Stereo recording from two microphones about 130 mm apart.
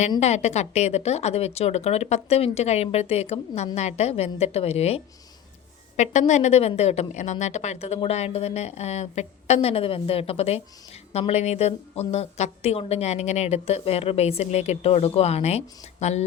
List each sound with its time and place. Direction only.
0.2 s a woman's voice: 60° left (ahead or behind)
6.0 s a woman's voice: 65° left (ahead or behind)